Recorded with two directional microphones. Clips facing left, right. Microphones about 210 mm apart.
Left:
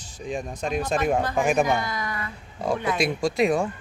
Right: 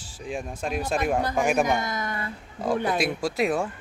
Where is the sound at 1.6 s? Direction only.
20° right (ahead or behind).